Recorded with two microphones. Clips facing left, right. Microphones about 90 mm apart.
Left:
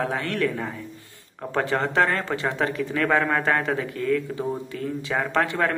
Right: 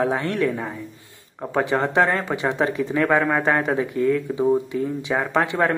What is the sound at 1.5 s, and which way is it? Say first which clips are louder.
Speech: right 3 dB; 10° right (ahead or behind).